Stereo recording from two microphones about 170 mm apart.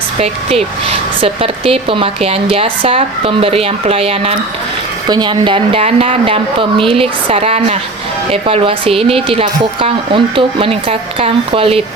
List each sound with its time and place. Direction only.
0.2 s speech: 35° right (ahead or behind)